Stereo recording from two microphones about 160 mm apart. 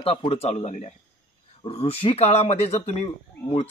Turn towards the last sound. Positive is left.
turn(degrees=40)  # may be behind; listen again after turning